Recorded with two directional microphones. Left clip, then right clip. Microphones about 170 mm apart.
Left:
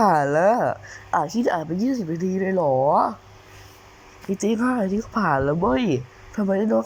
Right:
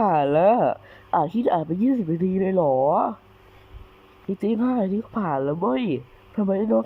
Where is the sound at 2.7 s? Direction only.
15° right (ahead or behind).